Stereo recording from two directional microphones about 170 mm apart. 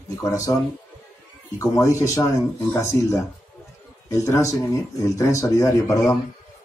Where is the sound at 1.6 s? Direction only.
20° left (ahead or behind).